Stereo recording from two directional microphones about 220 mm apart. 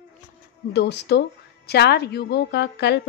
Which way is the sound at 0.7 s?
50° left (ahead or behind).